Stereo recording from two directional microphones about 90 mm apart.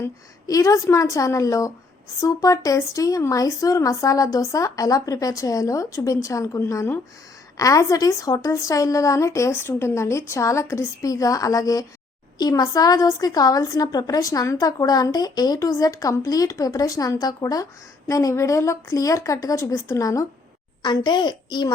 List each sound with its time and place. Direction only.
0.0 s a woman's voice: 40° left (ahead or behind)
20.8 s a child's voice: 55° left (ahead or behind)